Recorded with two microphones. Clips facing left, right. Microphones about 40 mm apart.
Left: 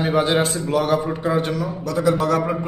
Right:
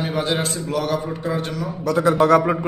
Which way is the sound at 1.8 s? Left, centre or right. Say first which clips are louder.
Right 2 dB; right.